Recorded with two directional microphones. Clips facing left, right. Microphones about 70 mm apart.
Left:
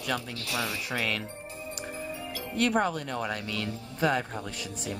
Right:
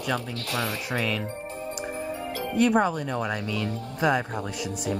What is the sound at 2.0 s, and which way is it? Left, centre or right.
Music, right.